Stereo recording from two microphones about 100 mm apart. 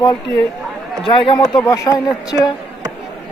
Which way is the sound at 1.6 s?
35° left (ahead or behind).